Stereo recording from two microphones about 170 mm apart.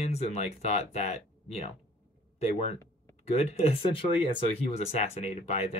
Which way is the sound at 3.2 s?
40° left (ahead or behind).